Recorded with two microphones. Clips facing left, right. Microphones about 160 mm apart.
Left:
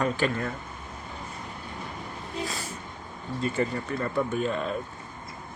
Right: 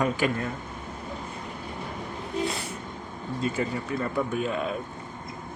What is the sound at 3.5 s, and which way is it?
Speech, 5° right (ahead or behind).